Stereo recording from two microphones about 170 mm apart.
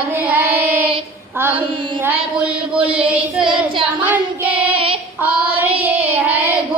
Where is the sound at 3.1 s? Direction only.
5° right (ahead or behind).